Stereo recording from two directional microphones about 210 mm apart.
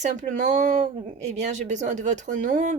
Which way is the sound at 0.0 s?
35° right (ahead or behind).